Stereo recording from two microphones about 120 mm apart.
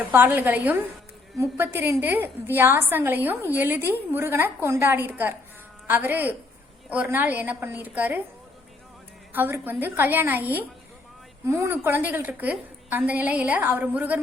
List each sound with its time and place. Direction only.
0.0 s a woman's voice: 15° right (ahead or behind)
9.3 s a woman's voice: 15° right (ahead or behind)